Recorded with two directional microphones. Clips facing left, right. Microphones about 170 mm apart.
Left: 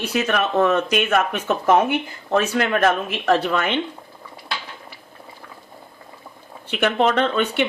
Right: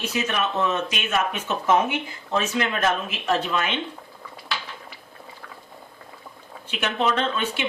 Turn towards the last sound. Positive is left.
turn(degrees=60)  # may be behind; listen again after turning